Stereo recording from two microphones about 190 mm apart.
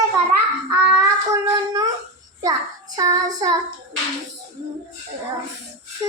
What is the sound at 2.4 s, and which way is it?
Child singing, 20° right (ahead or behind).